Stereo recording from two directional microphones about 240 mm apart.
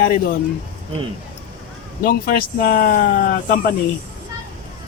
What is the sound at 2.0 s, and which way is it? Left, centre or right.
Speech, left.